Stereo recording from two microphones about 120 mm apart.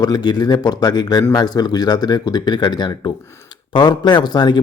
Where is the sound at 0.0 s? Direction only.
35° left (ahead or behind).